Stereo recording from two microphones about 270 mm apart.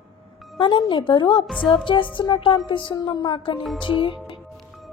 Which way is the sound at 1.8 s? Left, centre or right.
Centre.